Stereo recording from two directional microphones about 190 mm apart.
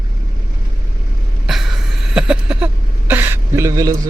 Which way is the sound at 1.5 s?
Centre (ahead or behind).